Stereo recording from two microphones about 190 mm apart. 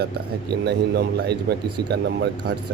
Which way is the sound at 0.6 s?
60° right (ahead or behind).